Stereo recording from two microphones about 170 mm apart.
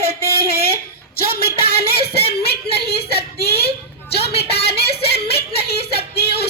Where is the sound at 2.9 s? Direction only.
70° left (ahead or behind).